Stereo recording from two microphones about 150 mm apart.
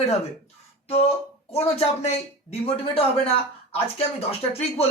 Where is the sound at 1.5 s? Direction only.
40° left (ahead or behind).